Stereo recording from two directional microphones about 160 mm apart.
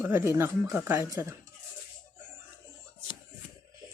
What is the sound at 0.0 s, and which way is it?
Speech, 15° right (ahead or behind).